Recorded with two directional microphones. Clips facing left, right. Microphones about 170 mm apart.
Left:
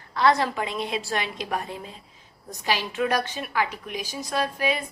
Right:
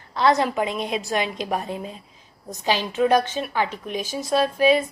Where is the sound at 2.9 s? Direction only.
20° right (ahead or behind).